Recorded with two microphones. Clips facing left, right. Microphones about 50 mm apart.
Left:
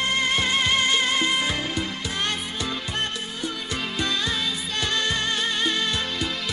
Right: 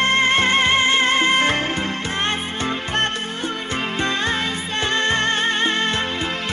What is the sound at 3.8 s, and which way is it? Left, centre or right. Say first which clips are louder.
Music: right 4 dB; right.